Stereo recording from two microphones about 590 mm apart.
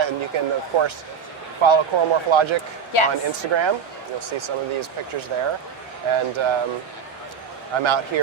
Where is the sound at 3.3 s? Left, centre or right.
Right.